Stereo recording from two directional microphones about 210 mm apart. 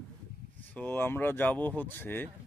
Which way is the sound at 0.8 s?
10° left (ahead or behind).